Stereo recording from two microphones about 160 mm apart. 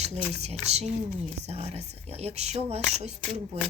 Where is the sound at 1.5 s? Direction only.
40° right (ahead or behind).